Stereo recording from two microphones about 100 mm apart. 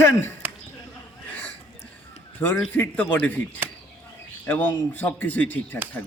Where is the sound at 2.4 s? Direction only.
25° left (ahead or behind).